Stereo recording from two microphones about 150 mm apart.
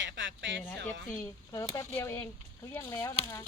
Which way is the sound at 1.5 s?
25° left (ahead or behind).